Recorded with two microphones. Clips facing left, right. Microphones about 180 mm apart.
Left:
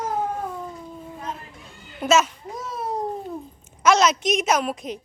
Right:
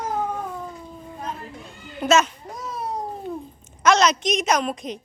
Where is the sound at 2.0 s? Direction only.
5° left (ahead or behind).